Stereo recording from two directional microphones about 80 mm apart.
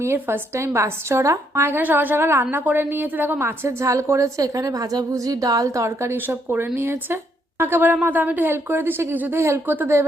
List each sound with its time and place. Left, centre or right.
0.0 s a woman's voice: right
6.1 s a woman's voice: right